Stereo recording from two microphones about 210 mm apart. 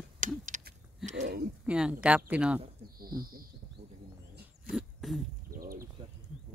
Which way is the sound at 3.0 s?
45° right (ahead or behind).